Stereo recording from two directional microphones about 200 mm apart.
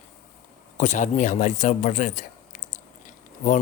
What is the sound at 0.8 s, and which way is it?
A man's voice, 40° left (ahead or behind).